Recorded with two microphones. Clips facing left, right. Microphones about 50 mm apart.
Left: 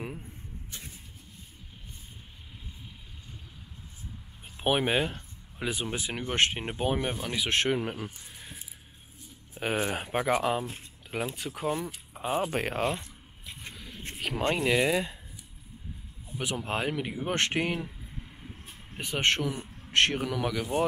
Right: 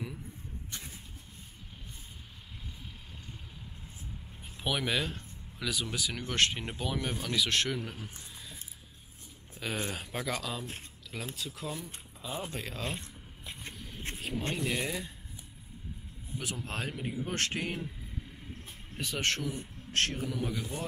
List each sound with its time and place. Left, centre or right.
4.4 s speech: left
9.5 s speech: left
14.3 s speech: left
16.3 s speech: left
16.9 s speech: left
18.9 s speech: left
20.4 s speech: left